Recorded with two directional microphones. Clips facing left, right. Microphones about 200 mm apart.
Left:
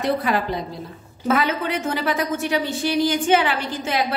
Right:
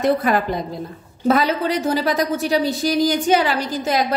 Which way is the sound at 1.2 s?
35° right (ahead or behind).